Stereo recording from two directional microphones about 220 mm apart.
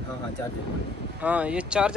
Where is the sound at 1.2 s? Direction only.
5° right (ahead or behind).